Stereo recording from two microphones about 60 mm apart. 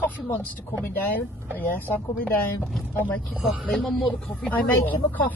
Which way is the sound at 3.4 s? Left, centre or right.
Centre.